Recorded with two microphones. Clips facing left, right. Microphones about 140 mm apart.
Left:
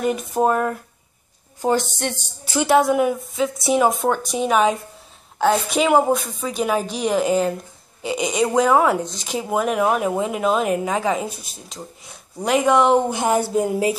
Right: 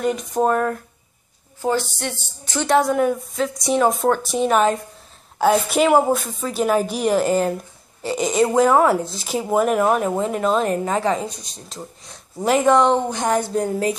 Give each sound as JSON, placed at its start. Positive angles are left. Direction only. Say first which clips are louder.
{"t": 0.0, "sound": "a woman's voice", "louder": "even", "side_deg": 5}
{"t": 2.4, "sound": "speech", "louder": "left 1 dB", "side_deg": 5}